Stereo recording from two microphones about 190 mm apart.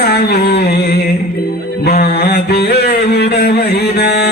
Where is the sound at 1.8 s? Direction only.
55° left (ahead or behind).